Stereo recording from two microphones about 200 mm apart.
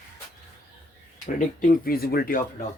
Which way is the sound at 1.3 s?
45° left (ahead or behind).